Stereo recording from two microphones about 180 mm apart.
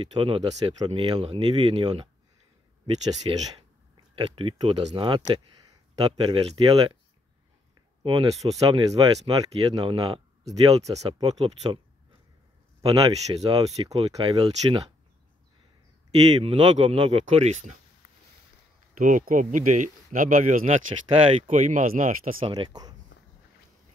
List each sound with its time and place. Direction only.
0.1 s speech: 25° right (ahead or behind)
3.3 s speech: 30° right (ahead or behind)
8.0 s speech: 30° right (ahead or behind)
13.0 s speech: 30° right (ahead or behind)
16.4 s speech: 30° right (ahead or behind)
18.9 s speech: 45° right (ahead or behind)
22.4 s speech: 25° right (ahead or behind)